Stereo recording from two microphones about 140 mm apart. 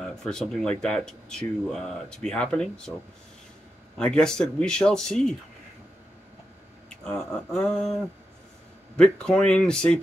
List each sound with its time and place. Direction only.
0.1 s speech: 5° left (ahead or behind)
4.0 s speech: 5° left (ahead or behind)
6.9 s speech: 10° left (ahead or behind)